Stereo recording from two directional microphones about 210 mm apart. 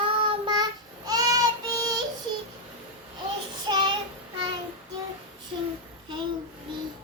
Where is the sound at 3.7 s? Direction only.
20° right (ahead or behind).